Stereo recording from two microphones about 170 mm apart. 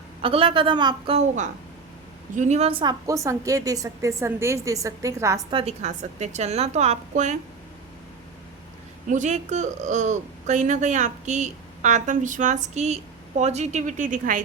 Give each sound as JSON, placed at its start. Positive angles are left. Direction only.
{"t": 0.2, "sound": "a woman's voice", "side_deg": -30}
{"t": 2.3, "sound": "a woman's voice", "side_deg": -45}
{"t": 3.1, "sound": "a woman's voice", "side_deg": -20}
{"t": 5.5, "sound": "a woman's voice", "side_deg": -35}
{"t": 9.0, "sound": "speech", "side_deg": -45}